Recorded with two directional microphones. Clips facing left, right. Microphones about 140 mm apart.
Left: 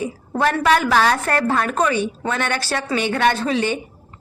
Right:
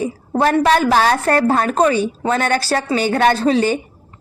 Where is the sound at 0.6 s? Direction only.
30° right (ahead or behind).